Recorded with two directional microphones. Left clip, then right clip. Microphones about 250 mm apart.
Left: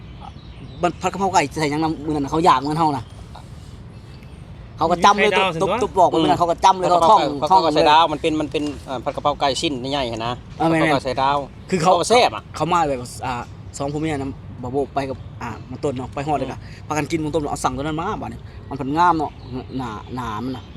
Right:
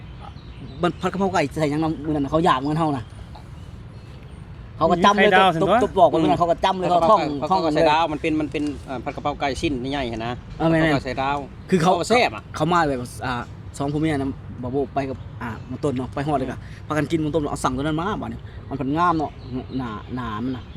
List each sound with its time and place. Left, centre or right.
0.8 s speech: right
4.8 s speech: centre
7.2 s speech: centre
10.6 s speech: right
10.9 s speech: centre
11.7 s speech: right
11.9 s speech: centre
12.5 s speech: right